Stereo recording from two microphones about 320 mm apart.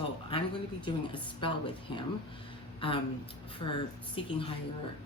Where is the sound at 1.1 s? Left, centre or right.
Centre.